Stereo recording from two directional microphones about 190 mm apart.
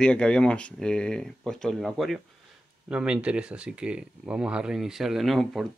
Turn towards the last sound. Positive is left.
turn(degrees=0)  # may be behind; listen again after turning